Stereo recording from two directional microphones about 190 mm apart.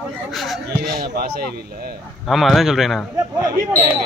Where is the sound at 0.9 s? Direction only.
55° right (ahead or behind).